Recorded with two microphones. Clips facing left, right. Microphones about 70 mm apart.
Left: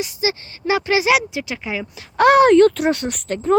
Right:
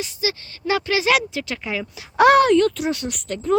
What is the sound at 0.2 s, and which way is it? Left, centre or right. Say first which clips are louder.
Speech: left 2 dB; left.